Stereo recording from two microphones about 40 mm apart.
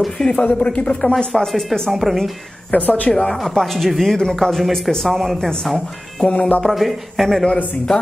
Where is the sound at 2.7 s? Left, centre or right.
Left.